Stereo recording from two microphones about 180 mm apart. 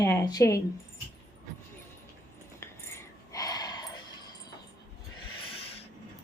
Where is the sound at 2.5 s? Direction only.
15° left (ahead or behind).